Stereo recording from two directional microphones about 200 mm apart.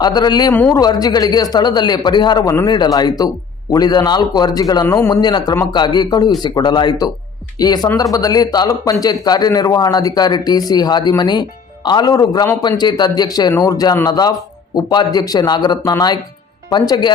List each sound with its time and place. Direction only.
0.0 s speech: 20° left (ahead or behind)